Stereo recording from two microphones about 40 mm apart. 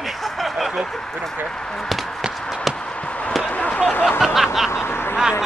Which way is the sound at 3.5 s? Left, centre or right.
Left.